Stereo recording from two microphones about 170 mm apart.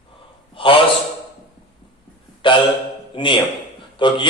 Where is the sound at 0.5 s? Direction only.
30° left (ahead or behind).